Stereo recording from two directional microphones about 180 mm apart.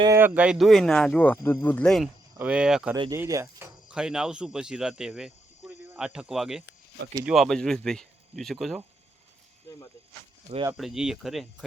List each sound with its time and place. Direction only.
0.0 s speech: 15° right (ahead or behind)
2.9 s speech: 20° right (ahead or behind)
3.8 s speech: 5° right (ahead or behind)
10.8 s speech: centre (ahead or behind)